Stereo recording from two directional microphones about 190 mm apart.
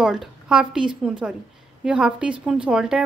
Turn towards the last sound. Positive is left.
turn(degrees=-5)  # may be behind; listen again after turning